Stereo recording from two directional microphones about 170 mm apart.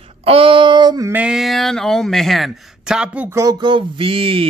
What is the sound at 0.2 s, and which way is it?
Speech, 35° right (ahead or behind).